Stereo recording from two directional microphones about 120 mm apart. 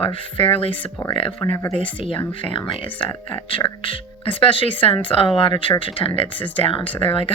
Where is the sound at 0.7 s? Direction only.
15° left (ahead or behind).